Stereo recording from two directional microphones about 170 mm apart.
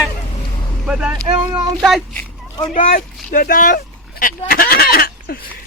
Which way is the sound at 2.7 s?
45° left (ahead or behind).